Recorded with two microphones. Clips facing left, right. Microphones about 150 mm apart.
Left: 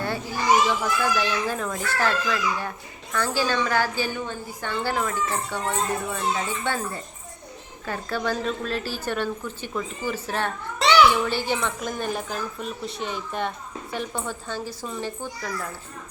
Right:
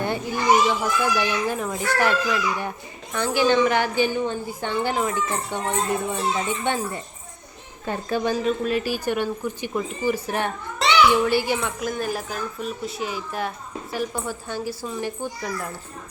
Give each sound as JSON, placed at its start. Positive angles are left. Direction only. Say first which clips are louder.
{"t": 0.8, "sound": "speech", "louder": "right 1 dB", "side_deg": -15}
{"t": 7.9, "sound": "a woman's voice", "louder": "right 3 dB", "side_deg": -15}
{"t": 10.8, "sound": "a sound", "louder": "left 1 dB", "side_deg": 0}
{"t": 11.3, "sound": "a woman's voice", "louder": "right 3 dB", "side_deg": -10}
{"t": 15.2, "sound": "a woman's voice", "louder": "right 2 dB", "side_deg": -20}